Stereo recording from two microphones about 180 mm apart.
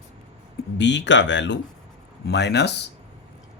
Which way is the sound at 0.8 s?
75° left (ahead or behind).